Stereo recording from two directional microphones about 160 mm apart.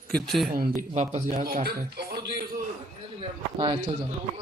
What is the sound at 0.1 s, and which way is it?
Speech, centre (ahead or behind).